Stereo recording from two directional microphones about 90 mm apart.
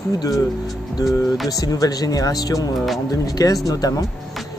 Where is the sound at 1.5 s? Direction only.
40° left (ahead or behind).